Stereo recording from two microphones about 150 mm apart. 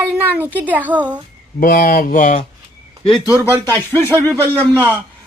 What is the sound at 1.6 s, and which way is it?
Speech, 70° left (ahead or behind).